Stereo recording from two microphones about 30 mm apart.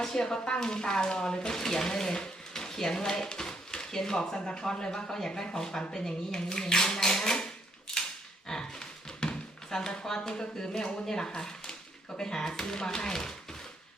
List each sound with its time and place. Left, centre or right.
0.0 s speech: centre
2.5 s a sound: centre
4.4 s speech: left
4.6 s speech: left
5.0 s speech: centre
8.4 s a sound: left
9.6 s speech: centre